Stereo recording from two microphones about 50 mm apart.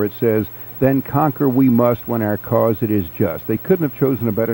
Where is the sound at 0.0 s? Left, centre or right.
Centre.